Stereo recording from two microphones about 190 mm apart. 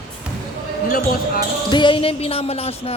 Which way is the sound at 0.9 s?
50° left (ahead or behind).